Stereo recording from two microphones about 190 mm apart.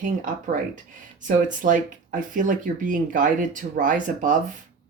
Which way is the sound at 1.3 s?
45° right (ahead or behind).